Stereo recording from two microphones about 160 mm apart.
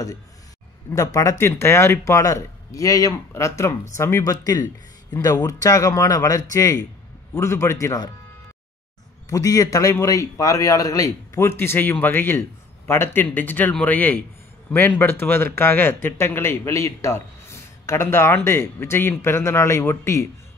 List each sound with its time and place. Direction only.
0.9 s speech: 20° left (ahead or behind)
9.3 s speech: 20° left (ahead or behind)